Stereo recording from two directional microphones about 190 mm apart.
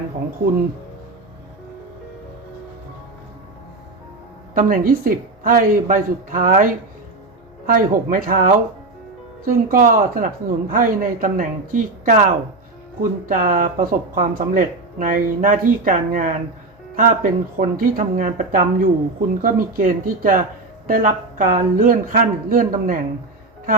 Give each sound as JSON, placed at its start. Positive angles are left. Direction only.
{"t": 4.5, "sound": "speech", "side_deg": -45}
{"t": 7.7, "sound": "speech", "side_deg": -45}